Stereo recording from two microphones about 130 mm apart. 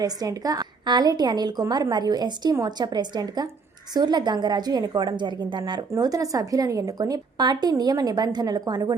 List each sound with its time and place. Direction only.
0.0 s a woman's voice: 30° right (ahead or behind)